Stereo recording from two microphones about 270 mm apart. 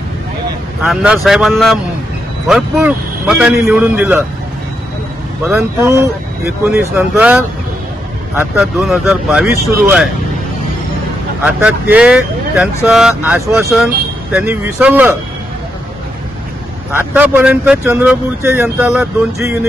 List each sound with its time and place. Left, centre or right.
0.8 s speech: centre
5.5 s speech: centre
11.4 s speech: centre
17.1 s speech: centre